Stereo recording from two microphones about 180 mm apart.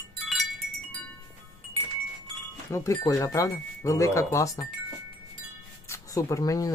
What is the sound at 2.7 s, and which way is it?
Speech, 20° left (ahead or behind).